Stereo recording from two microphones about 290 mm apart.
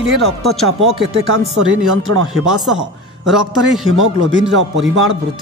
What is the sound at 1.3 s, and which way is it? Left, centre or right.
Speech, right.